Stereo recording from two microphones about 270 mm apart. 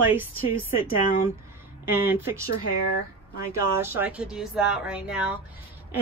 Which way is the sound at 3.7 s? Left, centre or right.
Centre.